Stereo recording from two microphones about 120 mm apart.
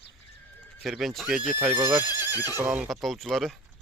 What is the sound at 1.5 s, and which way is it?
Speech, 20° right (ahead or behind).